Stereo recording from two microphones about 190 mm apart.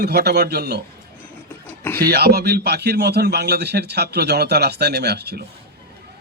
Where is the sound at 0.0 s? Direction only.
55° right (ahead or behind).